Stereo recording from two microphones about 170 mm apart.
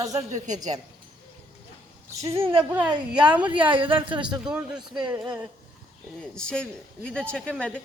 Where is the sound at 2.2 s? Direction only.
20° right (ahead or behind).